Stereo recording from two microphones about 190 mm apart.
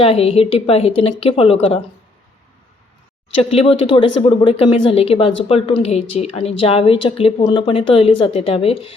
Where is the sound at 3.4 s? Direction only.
30° left (ahead or behind).